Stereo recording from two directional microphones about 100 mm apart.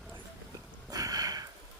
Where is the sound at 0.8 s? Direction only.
35° right (ahead or behind).